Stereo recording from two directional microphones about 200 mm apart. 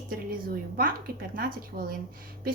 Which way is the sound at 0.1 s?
45° right (ahead or behind).